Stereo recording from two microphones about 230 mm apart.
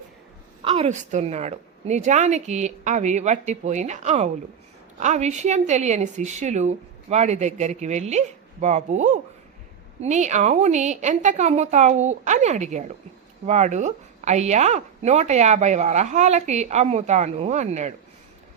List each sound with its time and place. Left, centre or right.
0.6 s a woman's voice: right